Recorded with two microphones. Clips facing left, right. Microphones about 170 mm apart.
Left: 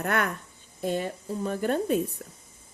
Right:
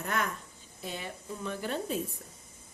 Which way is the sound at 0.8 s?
45° left (ahead or behind).